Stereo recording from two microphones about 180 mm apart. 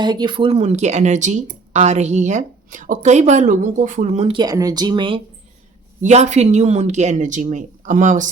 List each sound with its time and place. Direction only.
0.0 s speech: 25° right (ahead or behind)
4.4 s speech: 20° right (ahead or behind)
6.0 s speech: 40° right (ahead or behind)